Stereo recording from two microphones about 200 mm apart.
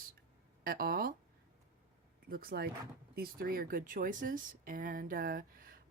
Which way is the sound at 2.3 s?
50° right (ahead or behind).